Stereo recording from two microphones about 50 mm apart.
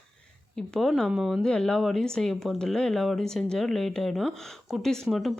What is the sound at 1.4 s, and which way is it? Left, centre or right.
Speech, centre.